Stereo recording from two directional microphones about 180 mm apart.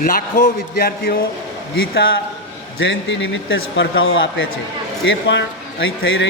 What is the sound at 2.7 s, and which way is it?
A man's voice, 85° left.